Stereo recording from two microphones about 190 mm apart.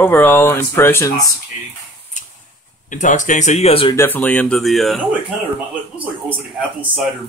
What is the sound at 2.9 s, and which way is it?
Speech, 40° left (ahead or behind).